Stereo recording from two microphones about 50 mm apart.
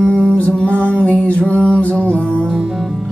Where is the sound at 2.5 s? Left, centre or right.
Centre.